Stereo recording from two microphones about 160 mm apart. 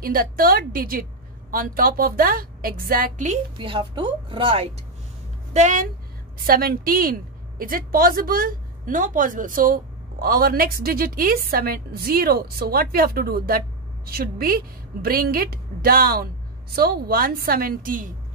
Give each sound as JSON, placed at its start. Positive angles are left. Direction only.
{"t": 0.0, "sound": "a woman's voice", "side_deg": -65}
{"t": 3.5, "sound": "speech", "side_deg": -30}
{"t": 5.5, "sound": "speech", "side_deg": -50}
{"t": 6.4, "sound": "a woman's voice", "side_deg": -65}